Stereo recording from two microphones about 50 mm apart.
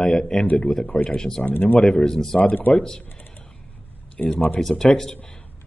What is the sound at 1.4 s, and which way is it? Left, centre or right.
Speech, left.